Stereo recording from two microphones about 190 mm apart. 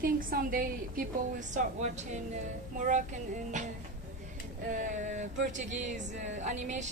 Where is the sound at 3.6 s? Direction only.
40° right (ahead or behind).